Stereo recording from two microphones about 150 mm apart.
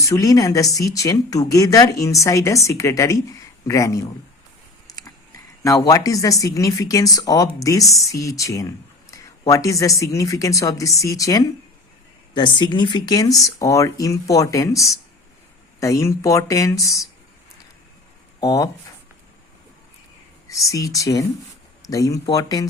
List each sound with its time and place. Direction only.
0.0 s speech: 20° left (ahead or behind)
9.0 s a sound: 20° left (ahead or behind)
9.5 s speech: 20° left (ahead or behind)
18.3 s speech: 25° left (ahead or behind)
20.5 s speech: 20° left (ahead or behind)